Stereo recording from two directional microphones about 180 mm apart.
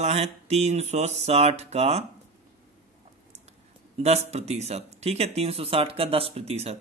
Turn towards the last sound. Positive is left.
turn(degrees=-35)  # may be behind; listen again after turning